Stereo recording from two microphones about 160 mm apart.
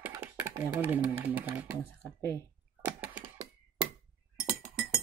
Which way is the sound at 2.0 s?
15° left (ahead or behind).